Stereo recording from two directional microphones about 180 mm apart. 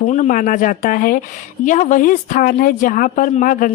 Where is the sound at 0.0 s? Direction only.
45° left (ahead or behind).